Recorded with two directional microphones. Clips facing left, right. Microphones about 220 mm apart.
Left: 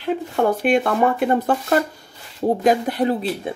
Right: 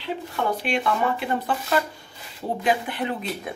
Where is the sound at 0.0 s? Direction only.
50° left (ahead or behind).